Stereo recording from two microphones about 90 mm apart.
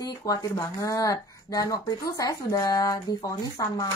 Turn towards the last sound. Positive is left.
turn(degrees=40)  # may be behind; listen again after turning